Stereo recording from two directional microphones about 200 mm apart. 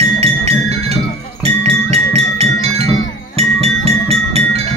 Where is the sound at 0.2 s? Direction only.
30° right (ahead or behind).